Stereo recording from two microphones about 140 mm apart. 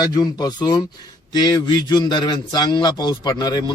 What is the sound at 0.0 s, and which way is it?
A man's voice, 30° left (ahead or behind).